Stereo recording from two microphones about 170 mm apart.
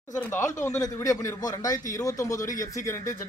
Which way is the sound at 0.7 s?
20° left (ahead or behind).